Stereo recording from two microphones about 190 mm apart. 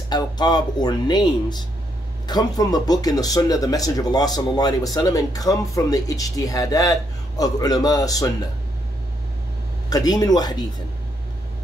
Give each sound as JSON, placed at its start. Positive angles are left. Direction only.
{"t": 0.1, "sound": "speech", "side_deg": 20}
{"t": 9.8, "sound": "speech", "side_deg": 20}